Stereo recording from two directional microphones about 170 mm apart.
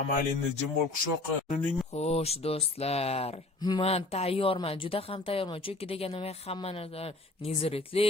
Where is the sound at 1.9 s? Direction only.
40° left (ahead or behind).